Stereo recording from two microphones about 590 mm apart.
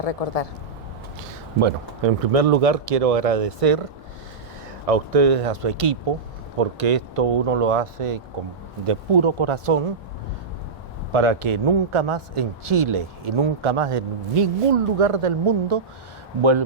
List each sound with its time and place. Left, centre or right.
0.0 s speech: left
1.6 s speech: right
4.9 s speech: right
6.6 s speech: right
11.1 s speech: right